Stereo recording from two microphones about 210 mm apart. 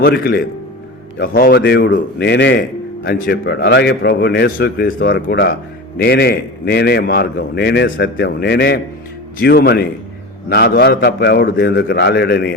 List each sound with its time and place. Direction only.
0.0 s speech: 50° left (ahead or behind)